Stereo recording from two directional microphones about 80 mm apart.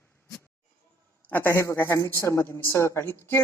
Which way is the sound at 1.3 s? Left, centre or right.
Left.